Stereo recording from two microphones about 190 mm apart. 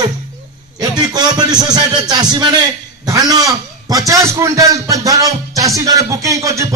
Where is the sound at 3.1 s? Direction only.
20° right (ahead or behind).